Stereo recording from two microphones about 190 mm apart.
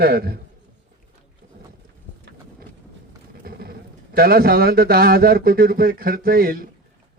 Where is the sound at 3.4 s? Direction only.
50° right (ahead or behind).